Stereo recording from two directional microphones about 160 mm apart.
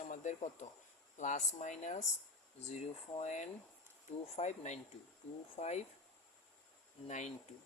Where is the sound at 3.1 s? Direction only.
45° left (ahead or behind).